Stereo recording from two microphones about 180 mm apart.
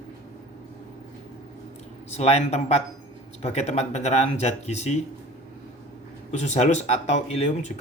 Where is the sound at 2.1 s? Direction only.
35° left (ahead or behind).